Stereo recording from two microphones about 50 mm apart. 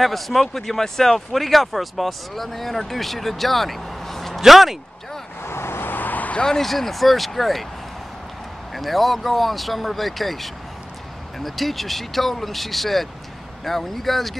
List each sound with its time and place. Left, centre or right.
0.0 s speech: centre
5.4 s vehicle: left
6.3 s speech: centre
8.7 s speech: centre